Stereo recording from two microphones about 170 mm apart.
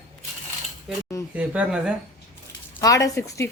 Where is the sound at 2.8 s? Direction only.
20° left (ahead or behind).